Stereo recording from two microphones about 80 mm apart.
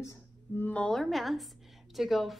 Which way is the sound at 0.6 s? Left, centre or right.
Centre.